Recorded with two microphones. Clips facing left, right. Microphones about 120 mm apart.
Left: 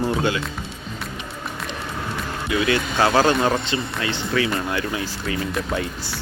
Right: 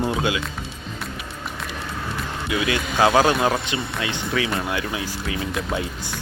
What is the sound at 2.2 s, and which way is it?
Speech, 5° right (ahead or behind).